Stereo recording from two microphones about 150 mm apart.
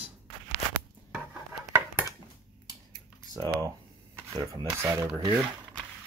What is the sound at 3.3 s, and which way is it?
Speech, 25° right (ahead or behind).